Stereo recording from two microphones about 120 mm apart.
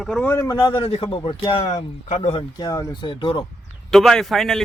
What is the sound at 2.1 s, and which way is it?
Speech, 70° left (ahead or behind).